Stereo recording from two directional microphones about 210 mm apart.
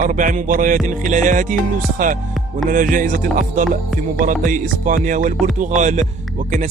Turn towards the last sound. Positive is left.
turn(degrees=-35)  # may be behind; listen again after turning